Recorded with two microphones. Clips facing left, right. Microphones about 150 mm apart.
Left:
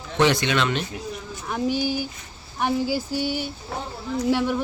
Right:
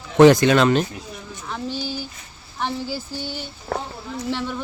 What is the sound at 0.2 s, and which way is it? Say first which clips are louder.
Speech: right 8 dB; 45° right (ahead or behind).